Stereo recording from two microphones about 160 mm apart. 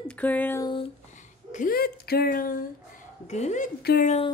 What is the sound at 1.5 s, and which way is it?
Speech, 60° left (ahead or behind).